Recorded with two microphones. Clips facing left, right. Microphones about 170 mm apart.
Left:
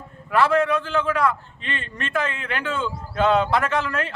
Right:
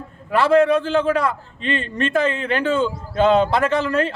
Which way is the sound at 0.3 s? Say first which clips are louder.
Right 4 dB; 30° right (ahead or behind).